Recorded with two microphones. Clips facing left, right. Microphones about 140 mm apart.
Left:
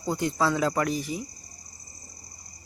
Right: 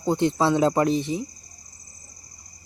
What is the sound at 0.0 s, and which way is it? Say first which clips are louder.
Speech: right 5 dB; 25° right (ahead or behind).